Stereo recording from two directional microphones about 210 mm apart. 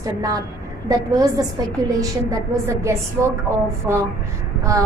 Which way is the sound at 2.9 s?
15° right (ahead or behind).